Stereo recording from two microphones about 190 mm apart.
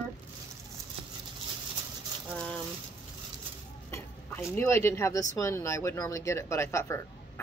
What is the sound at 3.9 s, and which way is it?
Speech, 15° left (ahead or behind).